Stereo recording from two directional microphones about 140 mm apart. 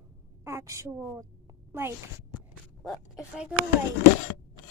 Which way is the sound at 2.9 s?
5° right (ahead or behind).